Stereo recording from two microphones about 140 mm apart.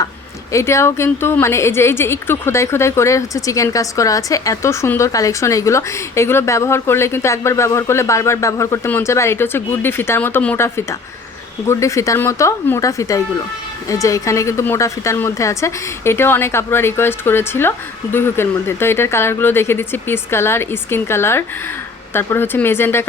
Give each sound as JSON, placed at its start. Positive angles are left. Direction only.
{"t": 0.5, "sound": "a woman's voice", "side_deg": 20}